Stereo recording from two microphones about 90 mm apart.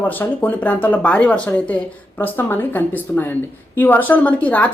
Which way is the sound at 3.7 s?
20° left (ahead or behind).